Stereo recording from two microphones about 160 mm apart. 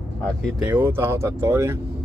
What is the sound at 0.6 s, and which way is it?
Speech, 10° right (ahead or behind).